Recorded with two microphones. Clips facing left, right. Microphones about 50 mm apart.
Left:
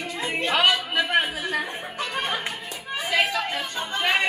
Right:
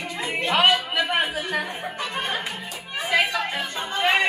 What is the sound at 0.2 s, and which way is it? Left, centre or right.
Music, centre.